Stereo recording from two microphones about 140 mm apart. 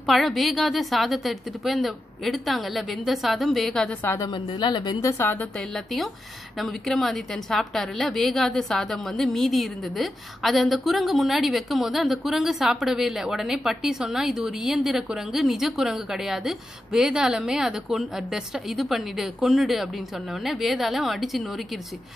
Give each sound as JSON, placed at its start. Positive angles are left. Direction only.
{"t": 0.0, "sound": "a woman's voice", "side_deg": 0}
{"t": 4.1, "sound": "a woman's voice", "side_deg": 30}
{"t": 6.6, "sound": "a woman's voice", "side_deg": 0}